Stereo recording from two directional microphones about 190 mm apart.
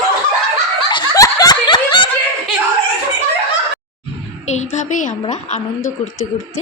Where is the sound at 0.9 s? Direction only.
20° left (ahead or behind).